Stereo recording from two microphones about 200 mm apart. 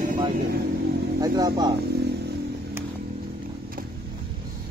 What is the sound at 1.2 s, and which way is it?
Speech, 20° right (ahead or behind).